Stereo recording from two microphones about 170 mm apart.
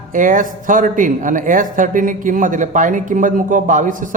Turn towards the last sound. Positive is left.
turn(degrees=-50)  # may be behind; listen again after turning